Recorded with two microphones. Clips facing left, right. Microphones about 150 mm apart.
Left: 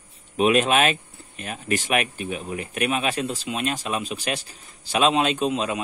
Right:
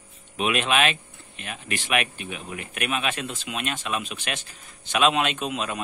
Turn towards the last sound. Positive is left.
turn(degrees=30)  # may be behind; listen again after turning